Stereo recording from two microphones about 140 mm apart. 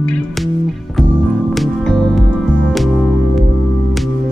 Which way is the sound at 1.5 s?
Centre (ahead or behind).